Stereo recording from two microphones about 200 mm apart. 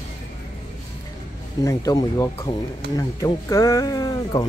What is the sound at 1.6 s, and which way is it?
Speech, 15° left (ahead or behind).